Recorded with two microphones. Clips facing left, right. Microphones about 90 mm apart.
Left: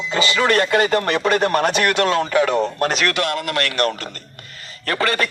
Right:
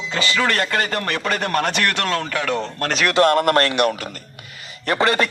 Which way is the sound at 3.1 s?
45° right (ahead or behind).